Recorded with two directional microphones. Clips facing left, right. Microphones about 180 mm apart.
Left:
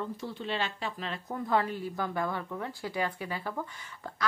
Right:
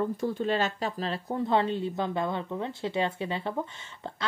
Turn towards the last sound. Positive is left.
turn(degrees=-25)  # may be behind; listen again after turning